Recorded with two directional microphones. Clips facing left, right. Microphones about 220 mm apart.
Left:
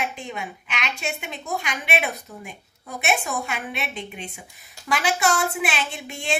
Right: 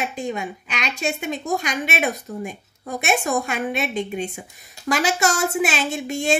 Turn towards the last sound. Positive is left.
turn(degrees=-45)  # may be behind; listen again after turning